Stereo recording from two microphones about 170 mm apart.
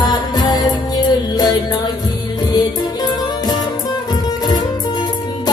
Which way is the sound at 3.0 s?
25° left (ahead or behind).